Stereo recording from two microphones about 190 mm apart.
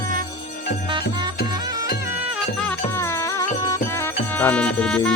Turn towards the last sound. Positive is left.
turn(degrees=5)  # may be behind; listen again after turning